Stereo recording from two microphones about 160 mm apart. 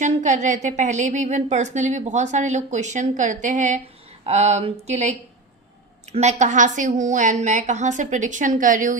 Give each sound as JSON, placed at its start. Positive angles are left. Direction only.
{"t": 0.0, "sound": "a woman's voice", "side_deg": -50}